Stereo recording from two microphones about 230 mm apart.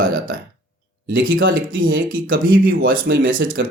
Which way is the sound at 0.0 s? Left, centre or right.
Right.